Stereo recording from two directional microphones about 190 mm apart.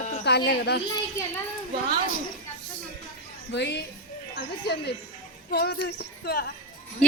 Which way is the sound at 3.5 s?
65° left (ahead or behind).